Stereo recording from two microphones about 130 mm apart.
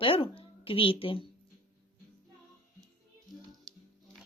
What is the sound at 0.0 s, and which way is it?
A woman's voice, 45° left (ahead or behind).